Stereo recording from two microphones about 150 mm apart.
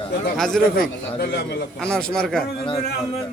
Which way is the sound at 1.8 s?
5° left (ahead or behind).